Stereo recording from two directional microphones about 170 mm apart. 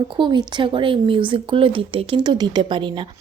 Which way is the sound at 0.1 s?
25° right (ahead or behind).